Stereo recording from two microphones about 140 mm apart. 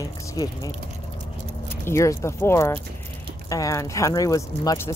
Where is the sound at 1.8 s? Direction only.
20° left (ahead or behind).